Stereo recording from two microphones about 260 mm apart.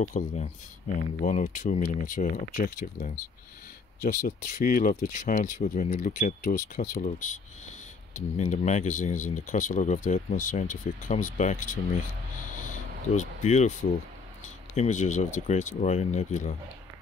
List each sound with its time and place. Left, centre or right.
0.0 s speech: left
13.1 s speech: left
14.8 s speech: left